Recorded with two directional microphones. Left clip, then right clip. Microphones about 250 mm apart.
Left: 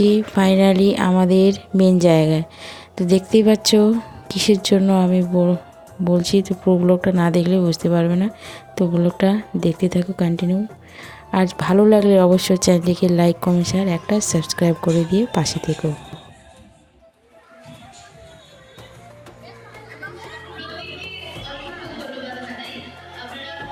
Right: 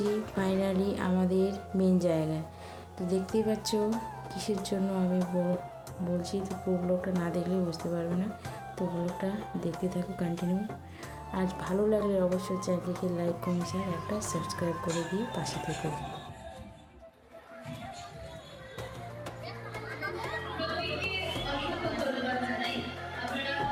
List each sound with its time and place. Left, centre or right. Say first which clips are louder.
0.0 s speech: left 14 dB; left